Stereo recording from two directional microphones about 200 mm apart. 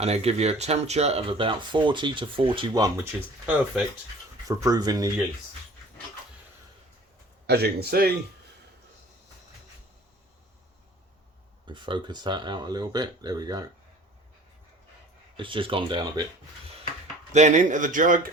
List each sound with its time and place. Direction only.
0.0 s speech: 30° right (ahead or behind)
3.4 s speech: 5° right (ahead or behind)
4.4 s speech: 15° right (ahead or behind)
7.4 s a man's voice: 55° right (ahead or behind)
11.6 s speech: 25° right (ahead or behind)
15.4 s speech: 25° right (ahead or behind)
17.3 s speech: 35° right (ahead or behind)